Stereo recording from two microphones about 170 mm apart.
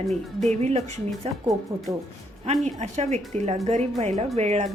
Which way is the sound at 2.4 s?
40° right (ahead or behind).